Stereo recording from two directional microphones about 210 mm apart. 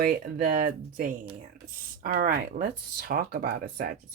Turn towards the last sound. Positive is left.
turn(degrees=-40)  # may be behind; listen again after turning